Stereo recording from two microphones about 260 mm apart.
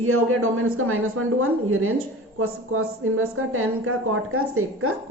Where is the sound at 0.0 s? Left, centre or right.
Right.